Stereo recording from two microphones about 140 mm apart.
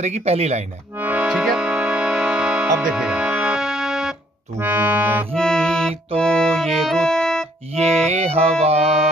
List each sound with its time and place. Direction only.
0.0 s music: 50° right (ahead or behind)
0.9 s music: 10° right (ahead or behind)
4.6 s accordion: 15° right (ahead or behind)
5.3 s music: 5° left (ahead or behind)
7.7 s music: 50° right (ahead or behind)